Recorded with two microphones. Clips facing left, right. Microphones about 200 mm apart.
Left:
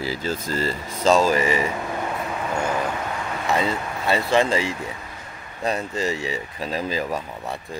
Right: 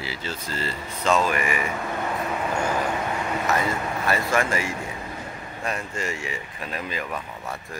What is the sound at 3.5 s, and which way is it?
Speech, 25° left (ahead or behind).